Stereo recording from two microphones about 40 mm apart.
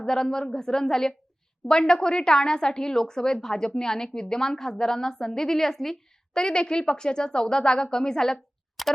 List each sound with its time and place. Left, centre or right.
0.0 s speech: centre
6.4 s speech: left
8.8 s camera: centre